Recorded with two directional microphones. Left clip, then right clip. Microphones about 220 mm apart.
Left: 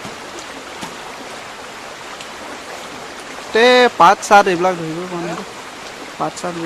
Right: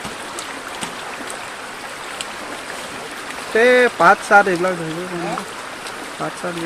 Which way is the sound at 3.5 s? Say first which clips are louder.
Left 2 dB; 20° left (ahead or behind).